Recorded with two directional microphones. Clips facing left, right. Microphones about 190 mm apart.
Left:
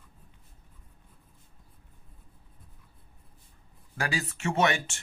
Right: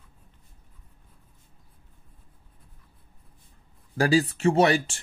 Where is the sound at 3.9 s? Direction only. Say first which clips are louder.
Right 11 dB; 35° right (ahead or behind).